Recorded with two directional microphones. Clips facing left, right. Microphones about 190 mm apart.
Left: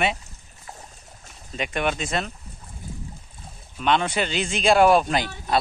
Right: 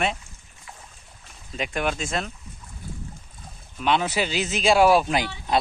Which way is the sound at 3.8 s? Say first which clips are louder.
Left 1 dB; 5° right (ahead or behind).